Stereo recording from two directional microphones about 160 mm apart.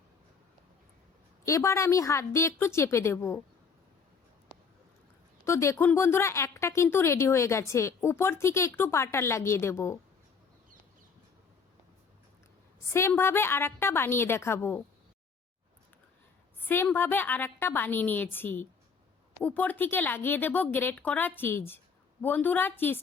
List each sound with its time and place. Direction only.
1.5 s speech: 20° left (ahead or behind)
5.5 s speech: 15° left (ahead or behind)
12.9 s speech: 15° left (ahead or behind)
16.6 s speech: 10° left (ahead or behind)